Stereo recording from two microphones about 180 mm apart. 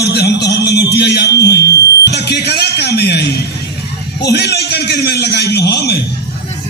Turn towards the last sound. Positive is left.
turn(degrees=65)  # may be behind; listen again after turning